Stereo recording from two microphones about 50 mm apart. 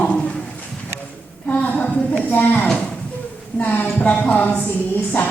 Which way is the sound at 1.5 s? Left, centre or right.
Left.